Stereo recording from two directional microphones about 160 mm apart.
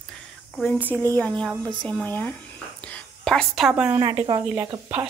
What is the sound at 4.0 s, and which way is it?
Speech, 35° right (ahead or behind).